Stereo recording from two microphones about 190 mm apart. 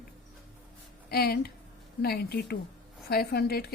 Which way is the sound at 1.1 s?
55° left (ahead or behind).